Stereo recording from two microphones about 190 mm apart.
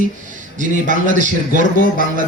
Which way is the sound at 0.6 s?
40° right (ahead or behind).